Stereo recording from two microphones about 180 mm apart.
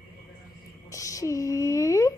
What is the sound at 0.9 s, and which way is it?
A woman's voice, 20° left (ahead or behind).